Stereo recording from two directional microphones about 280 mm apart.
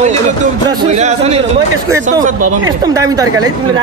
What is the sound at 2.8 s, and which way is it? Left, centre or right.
Speech, centre.